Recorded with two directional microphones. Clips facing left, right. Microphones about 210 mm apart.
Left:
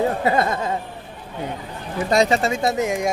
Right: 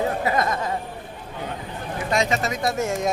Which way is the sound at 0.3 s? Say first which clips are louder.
Left 3 dB; 30° left (ahead or behind).